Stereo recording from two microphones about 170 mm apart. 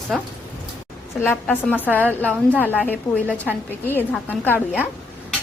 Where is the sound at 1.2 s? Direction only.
10° left (ahead or behind).